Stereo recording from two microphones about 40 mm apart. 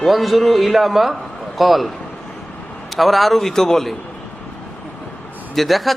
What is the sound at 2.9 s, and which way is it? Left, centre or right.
A man's voice, centre.